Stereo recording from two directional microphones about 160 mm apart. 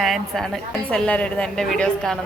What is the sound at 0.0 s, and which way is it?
A woman's voice, centre (ahead or behind).